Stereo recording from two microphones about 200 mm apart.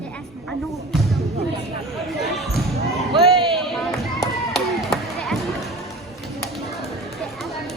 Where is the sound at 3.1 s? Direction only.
25° right (ahead or behind).